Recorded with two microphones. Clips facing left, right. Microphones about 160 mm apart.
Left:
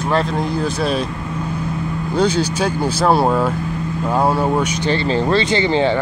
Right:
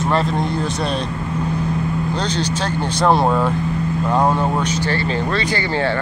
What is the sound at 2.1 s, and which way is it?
Speech, 10° left (ahead or behind).